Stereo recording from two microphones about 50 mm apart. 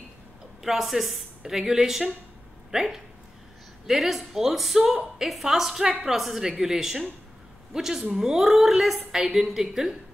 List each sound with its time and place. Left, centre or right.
0.7 s a woman's voice: centre
6.1 s a woman's voice: centre